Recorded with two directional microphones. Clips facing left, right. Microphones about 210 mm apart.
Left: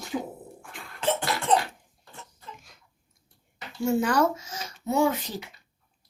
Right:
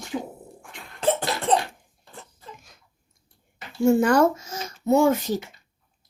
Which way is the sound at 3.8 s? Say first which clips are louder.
Right 6 dB; 50° right (ahead or behind).